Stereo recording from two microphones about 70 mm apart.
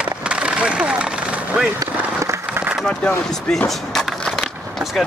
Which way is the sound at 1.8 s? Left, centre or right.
Right.